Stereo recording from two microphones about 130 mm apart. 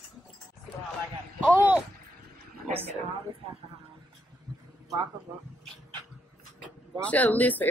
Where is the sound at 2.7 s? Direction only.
50° right (ahead or behind).